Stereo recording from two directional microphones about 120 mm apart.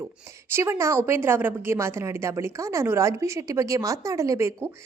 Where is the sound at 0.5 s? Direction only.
25° right (ahead or behind).